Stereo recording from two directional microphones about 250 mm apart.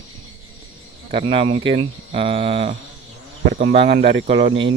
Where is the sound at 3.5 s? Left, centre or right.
Right.